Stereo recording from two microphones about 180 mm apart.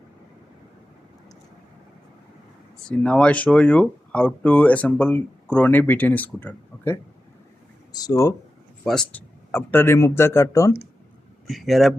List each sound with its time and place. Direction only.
2.8 s speech: 5° left (ahead or behind)
8.8 s speech: 5° left (ahead or behind)
11.4 s speech: centre (ahead or behind)